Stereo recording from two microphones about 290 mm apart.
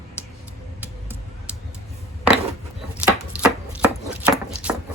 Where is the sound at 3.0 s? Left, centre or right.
Centre.